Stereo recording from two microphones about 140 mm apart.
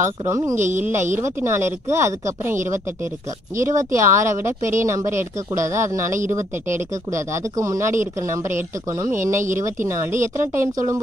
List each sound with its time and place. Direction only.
0.0 s speech: 20° right (ahead or behind)